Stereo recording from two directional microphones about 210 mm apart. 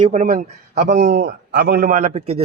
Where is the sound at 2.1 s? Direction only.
30° right (ahead or behind).